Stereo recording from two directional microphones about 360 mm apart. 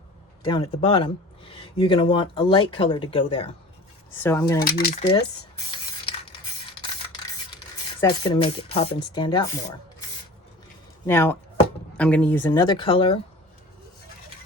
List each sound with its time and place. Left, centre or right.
0.4 s speech: centre
4.6 s speech: left
8.0 s speech: centre
11.0 s speech: centre